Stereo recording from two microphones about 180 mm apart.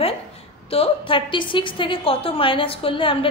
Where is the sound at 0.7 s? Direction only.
30° left (ahead or behind).